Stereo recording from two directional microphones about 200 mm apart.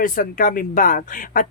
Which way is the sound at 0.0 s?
40° left (ahead or behind).